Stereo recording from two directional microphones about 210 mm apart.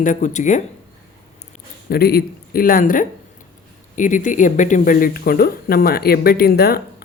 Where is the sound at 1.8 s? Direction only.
50° left (ahead or behind).